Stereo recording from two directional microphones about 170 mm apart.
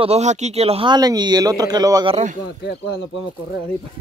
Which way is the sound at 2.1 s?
45° right (ahead or behind).